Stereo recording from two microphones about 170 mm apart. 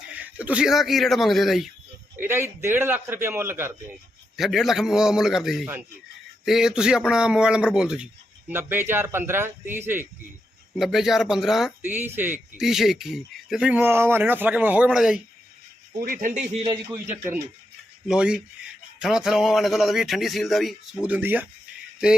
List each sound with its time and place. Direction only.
0.1 s speech: 10° right (ahead or behind)
2.1 s speech: 15° right (ahead or behind)
4.4 s speech: centre (ahead or behind)
10.8 s speech: centre (ahead or behind)
16.0 s speech: 55° right (ahead or behind)
16.9 s speech: 15° right (ahead or behind)